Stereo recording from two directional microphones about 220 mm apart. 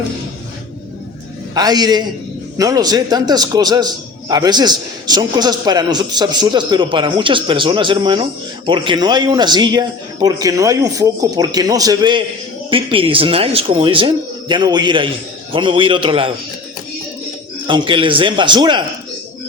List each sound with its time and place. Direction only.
1.5 s a man's voice: 15° right (ahead or behind)
17.7 s a man's voice: 20° right (ahead or behind)